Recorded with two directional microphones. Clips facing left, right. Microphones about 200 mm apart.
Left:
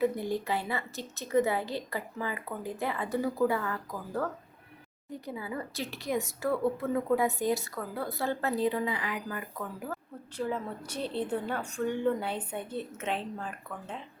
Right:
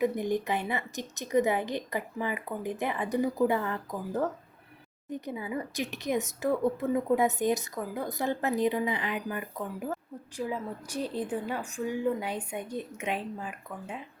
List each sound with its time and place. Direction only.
0.0 s a woman's voice: 20° right (ahead or behind)